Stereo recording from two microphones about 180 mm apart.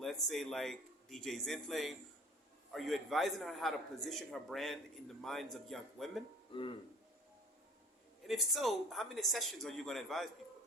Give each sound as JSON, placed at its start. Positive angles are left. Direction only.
{"t": 0.0, "sound": "a man's voice", "side_deg": 0}
{"t": 6.5, "sound": "speech", "side_deg": 30}
{"t": 8.3, "sound": "a man's voice", "side_deg": 0}